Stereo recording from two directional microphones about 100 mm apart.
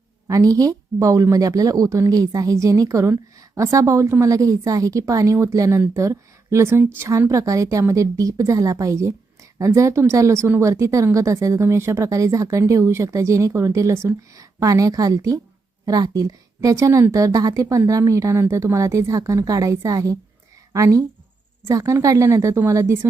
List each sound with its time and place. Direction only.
0.3 s a woman's voice: 35° right (ahead or behind)